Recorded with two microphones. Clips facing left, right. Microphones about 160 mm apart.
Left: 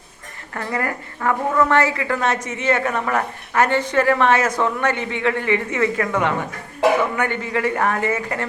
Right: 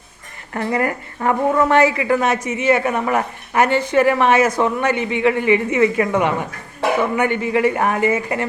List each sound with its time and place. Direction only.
0.5 s a woman's voice: 20° right (ahead or behind)